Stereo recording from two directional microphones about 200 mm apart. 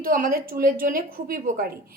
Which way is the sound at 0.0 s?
45° right (ahead or behind).